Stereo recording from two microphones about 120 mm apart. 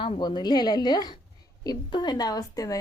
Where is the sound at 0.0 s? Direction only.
40° left (ahead or behind).